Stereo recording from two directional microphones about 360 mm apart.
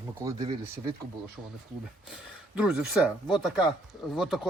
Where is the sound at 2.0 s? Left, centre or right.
Centre.